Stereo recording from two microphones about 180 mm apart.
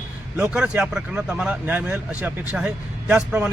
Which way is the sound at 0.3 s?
5° right (ahead or behind).